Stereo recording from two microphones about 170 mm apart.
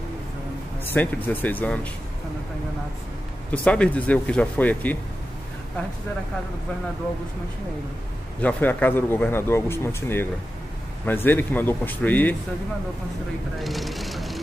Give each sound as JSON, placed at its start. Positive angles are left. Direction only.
{"t": 0.9, "sound": "speech", "side_deg": 10}
{"t": 3.5, "sound": "speech", "side_deg": 5}
{"t": 8.4, "sound": "speech", "side_deg": 10}
{"t": 11.2, "sound": "speech", "side_deg": 10}
{"t": 13.6, "sound": "speech", "side_deg": 0}